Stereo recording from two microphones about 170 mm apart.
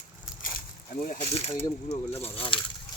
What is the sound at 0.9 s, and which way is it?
Speech, 50° left (ahead or behind).